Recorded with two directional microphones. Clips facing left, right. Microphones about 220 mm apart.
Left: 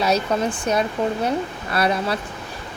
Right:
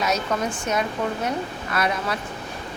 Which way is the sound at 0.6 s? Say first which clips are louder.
Left 4 dB; 30° left (ahead or behind).